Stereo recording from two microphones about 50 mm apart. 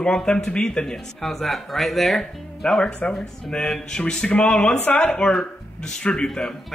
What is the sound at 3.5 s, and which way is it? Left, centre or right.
Speech, centre.